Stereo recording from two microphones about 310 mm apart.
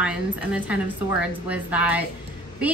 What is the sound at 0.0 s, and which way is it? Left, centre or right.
A woman's voice, centre.